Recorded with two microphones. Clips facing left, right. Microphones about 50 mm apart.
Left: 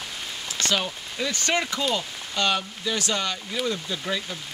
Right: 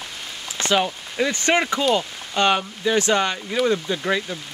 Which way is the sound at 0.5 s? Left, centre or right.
Right.